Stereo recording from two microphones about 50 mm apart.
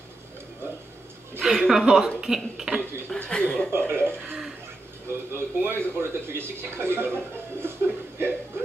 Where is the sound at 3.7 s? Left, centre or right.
Right.